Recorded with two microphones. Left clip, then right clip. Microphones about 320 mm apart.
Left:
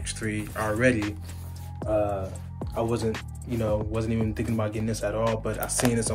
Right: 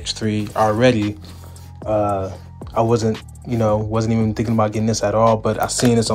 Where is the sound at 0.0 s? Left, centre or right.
Centre.